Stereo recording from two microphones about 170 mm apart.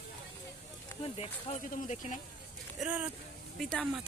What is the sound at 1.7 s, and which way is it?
Speech, 45° left (ahead or behind).